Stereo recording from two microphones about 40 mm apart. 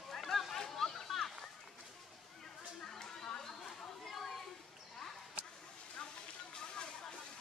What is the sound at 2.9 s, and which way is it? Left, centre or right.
Chatter, centre.